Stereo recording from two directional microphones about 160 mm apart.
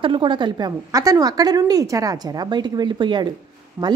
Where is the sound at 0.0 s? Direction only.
30° right (ahead or behind).